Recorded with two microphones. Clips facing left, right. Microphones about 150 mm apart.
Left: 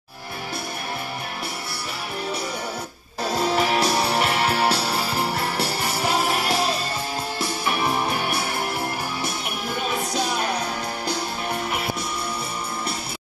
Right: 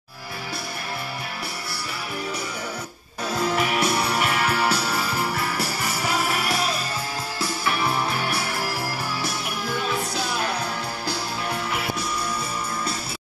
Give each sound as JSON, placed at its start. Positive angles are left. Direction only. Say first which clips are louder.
{"t": 3.3, "sound": "music", "louder": "left 2 dB", "side_deg": 30}